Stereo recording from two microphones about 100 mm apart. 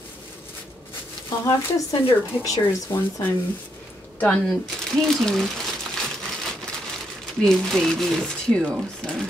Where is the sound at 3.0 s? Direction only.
20° left (ahead or behind).